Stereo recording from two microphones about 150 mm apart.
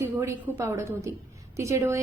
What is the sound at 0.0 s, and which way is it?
A woman's voice, 15° right (ahead or behind).